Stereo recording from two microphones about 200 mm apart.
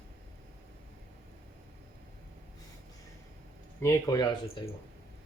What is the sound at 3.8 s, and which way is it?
Speech, 15° left (ahead or behind).